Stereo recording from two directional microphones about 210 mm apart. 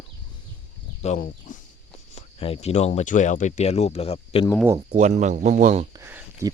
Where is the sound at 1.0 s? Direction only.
35° left (ahead or behind).